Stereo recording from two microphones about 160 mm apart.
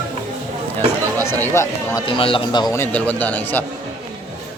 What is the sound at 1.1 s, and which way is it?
Speech, 15° left (ahead or behind).